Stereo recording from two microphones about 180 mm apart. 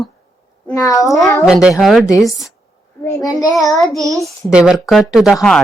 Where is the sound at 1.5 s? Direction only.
5° right (ahead or behind).